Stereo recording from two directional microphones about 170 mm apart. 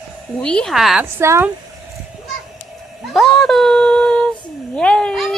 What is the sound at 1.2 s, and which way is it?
Speech, 15° right (ahead or behind).